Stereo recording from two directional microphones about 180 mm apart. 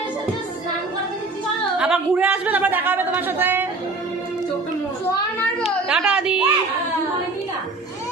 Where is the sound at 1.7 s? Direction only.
5° right (ahead or behind).